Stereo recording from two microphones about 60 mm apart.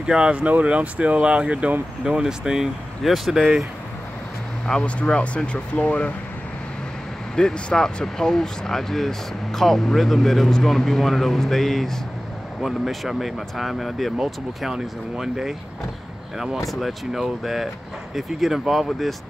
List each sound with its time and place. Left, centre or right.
0.0 s speech: centre
4.8 s speech: centre
7.3 s speech: centre
16.8 s speech: centre